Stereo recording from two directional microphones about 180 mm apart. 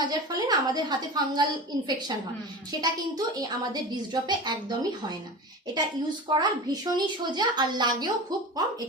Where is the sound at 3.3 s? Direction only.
20° right (ahead or behind).